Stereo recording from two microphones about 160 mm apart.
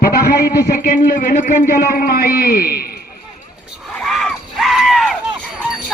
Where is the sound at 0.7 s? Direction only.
60° left (ahead or behind).